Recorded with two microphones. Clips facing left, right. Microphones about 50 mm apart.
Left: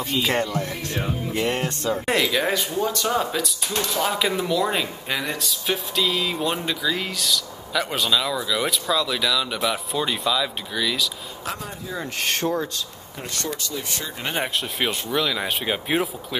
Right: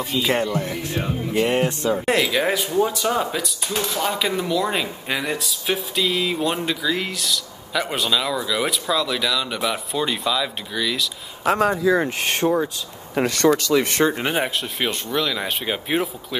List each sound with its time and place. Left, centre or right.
0.0 s speech: centre
0.9 s speech: centre
1.4 s speech: centre
11.5 s speech: right
12.2 s speech: centre
13.1 s speech: right
13.8 s speech: right
14.2 s speech: centre